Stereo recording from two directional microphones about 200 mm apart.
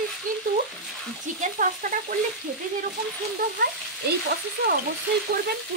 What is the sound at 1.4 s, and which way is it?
Speech, 40° right (ahead or behind).